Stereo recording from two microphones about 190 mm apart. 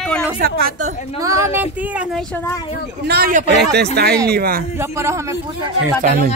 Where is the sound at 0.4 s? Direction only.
50° right (ahead or behind).